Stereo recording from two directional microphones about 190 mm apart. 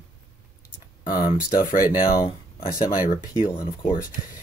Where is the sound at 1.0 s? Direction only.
20° left (ahead or behind).